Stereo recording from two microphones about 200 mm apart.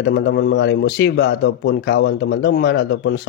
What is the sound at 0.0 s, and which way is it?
A man's voice, 60° left (ahead or behind).